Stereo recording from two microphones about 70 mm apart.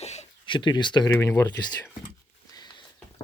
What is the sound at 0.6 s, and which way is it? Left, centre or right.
Speech, left.